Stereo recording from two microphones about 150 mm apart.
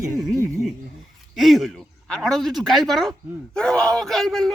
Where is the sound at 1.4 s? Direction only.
Centre (ahead or behind).